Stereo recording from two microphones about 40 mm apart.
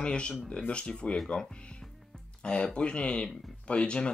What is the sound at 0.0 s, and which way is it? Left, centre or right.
Speech, left.